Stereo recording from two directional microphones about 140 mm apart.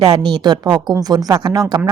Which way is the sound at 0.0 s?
30° right (ahead or behind).